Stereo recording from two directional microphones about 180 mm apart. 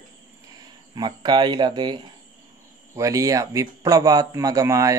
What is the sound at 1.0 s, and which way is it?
Speech, 25° right (ahead or behind).